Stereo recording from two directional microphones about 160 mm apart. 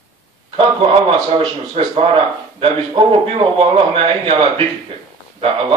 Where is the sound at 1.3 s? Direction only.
35° right (ahead or behind).